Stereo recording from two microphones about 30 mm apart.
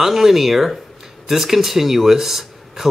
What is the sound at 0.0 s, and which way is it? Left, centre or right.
Speech, centre.